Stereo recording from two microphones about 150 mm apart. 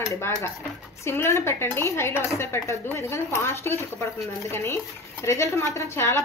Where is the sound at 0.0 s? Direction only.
20° left (ahead or behind).